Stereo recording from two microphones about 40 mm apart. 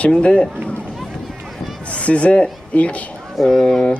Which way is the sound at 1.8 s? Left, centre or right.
Left.